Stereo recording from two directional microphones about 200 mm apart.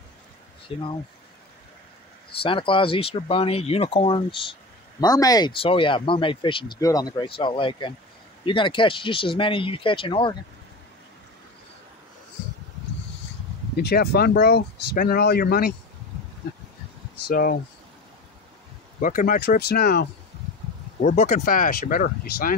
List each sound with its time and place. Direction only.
0.7 s speech: 25° left (ahead or behind)
2.4 s speech: 25° left (ahead or behind)
13.7 s speech: 50° left (ahead or behind)
17.3 s speech: 45° left (ahead or behind)
18.9 s speech: 45° left (ahead or behind)
21.0 s speech: 35° left (ahead or behind)